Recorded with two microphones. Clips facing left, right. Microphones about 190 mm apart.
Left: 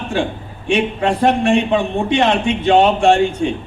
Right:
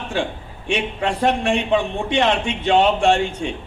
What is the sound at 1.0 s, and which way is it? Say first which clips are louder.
A man's voice: left 3 dB; 45° left (ahead or behind).